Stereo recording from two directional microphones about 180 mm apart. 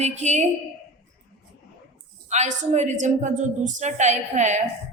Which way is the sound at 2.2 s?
40° right (ahead or behind).